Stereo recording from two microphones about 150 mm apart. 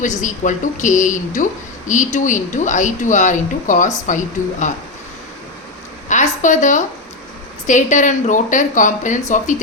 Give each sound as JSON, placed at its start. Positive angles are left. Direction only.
{"t": 0.0, "sound": "speech", "side_deg": 55}
{"t": 6.1, "sound": "a sound", "side_deg": 55}
{"t": 7.7, "sound": "speech", "side_deg": 55}